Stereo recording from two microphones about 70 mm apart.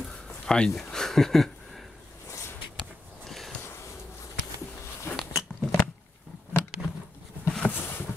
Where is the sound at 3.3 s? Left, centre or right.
Centre.